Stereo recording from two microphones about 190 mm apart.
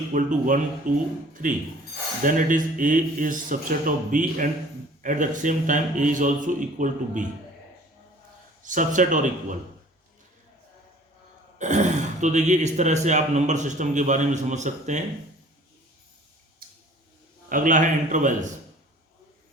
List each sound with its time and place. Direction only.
0.1 s speech: 45° right (ahead or behind)
8.6 s speech: 45° right (ahead or behind)
11.6 s speech: 40° right (ahead or behind)
17.5 s speech: 45° right (ahead or behind)